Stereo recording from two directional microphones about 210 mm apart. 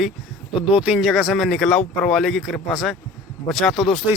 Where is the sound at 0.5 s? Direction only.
5° right (ahead or behind).